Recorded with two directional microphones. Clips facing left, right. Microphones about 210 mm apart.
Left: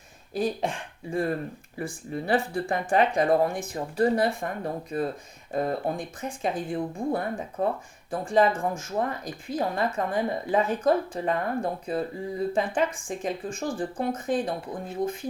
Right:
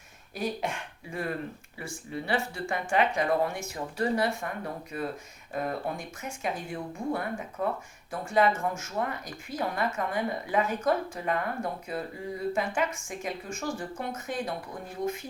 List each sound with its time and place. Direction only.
0.3 s a woman's voice: 30° left (ahead or behind)
1.8 s a woman's voice: 45° left (ahead or behind); by 15.2 s 30° left (ahead or behind)